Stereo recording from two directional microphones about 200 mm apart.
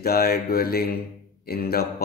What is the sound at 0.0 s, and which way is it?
Speech, 50° left (ahead or behind).